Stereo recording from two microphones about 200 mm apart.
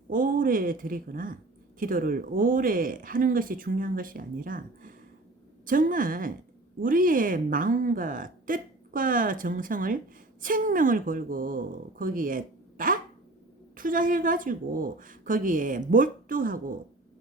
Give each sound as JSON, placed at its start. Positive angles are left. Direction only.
{"t": 0.1, "sound": "speech", "side_deg": -45}